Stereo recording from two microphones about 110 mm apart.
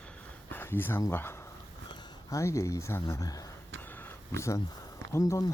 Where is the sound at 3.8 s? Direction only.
20° left (ahead or behind).